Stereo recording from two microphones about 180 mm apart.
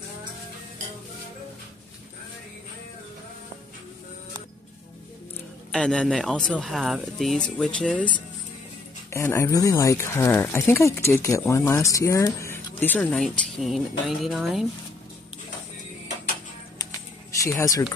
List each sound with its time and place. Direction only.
5.7 s speech: 5° left (ahead or behind)
16.7 s music: 20° left (ahead or behind)